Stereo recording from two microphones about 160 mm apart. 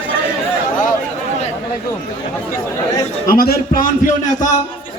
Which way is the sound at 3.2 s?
65° left (ahead or behind).